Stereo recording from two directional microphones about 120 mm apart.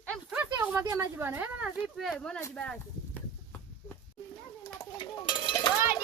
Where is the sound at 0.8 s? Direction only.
25° right (ahead or behind).